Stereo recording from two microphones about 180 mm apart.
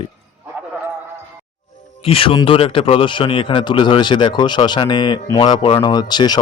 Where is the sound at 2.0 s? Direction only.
30° left (ahead or behind).